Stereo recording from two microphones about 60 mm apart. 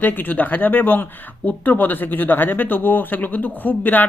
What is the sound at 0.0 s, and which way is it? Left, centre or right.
Speech, left.